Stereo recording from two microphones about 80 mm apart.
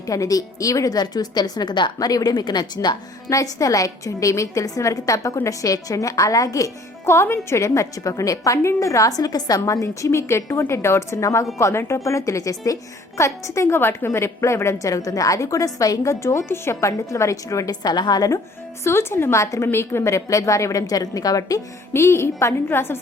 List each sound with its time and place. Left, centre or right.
0.1 s a woman's voice: left
2.0 s a woman's voice: left
3.2 s a woman's voice: left
18.9 s a woman's voice: left
21.9 s a woman's voice: left